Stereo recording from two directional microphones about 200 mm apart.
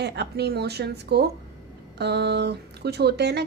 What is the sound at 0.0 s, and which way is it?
A woman's voice, 55° right (ahead or behind).